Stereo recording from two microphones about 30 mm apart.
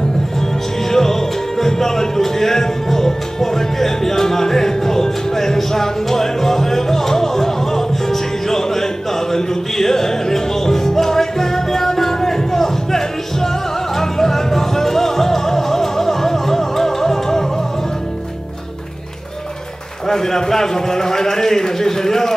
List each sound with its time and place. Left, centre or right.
0.8 s music: centre
20.1 s a man's voice: centre